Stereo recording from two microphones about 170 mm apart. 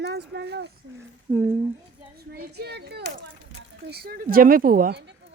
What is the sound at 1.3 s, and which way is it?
Speech, 15° right (ahead or behind).